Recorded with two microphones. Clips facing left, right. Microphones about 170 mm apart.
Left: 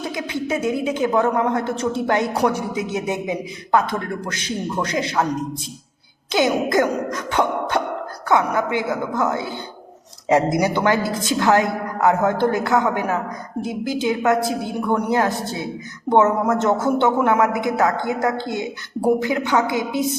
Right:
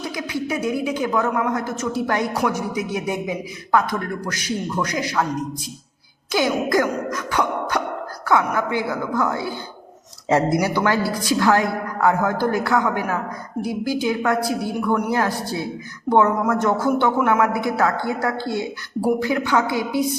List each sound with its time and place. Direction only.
0.0 s a woman's voice: 25° left (ahead or behind)
6.3 s a woman's voice: 25° left (ahead or behind)